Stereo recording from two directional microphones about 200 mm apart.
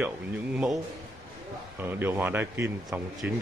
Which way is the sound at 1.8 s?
10° right (ahead or behind).